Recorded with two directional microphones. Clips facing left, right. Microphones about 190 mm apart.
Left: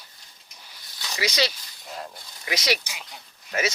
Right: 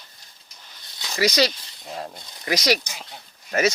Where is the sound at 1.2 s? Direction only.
40° right (ahead or behind).